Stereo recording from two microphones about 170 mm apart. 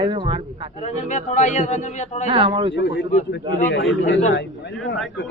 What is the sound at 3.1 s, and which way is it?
Speech, 50° left (ahead or behind).